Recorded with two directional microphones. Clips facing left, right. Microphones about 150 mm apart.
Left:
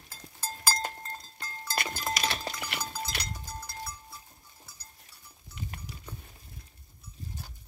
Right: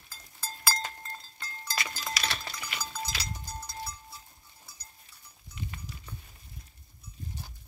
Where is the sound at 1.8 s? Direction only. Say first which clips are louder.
Left 4 dB; 55° left (ahead or behind).